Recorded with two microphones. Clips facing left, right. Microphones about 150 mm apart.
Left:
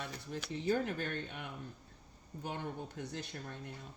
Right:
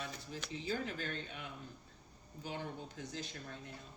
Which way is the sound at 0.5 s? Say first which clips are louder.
Left 6 dB; 55° left (ahead or behind).